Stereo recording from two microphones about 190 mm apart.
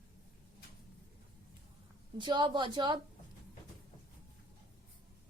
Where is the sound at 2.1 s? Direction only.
25° right (ahead or behind).